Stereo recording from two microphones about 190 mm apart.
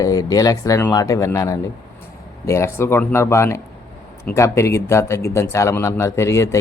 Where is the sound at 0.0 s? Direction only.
20° left (ahead or behind).